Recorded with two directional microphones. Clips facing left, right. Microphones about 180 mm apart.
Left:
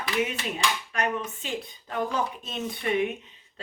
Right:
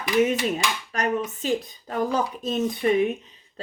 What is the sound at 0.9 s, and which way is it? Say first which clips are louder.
Speech: right 4 dB; 40° right (ahead or behind).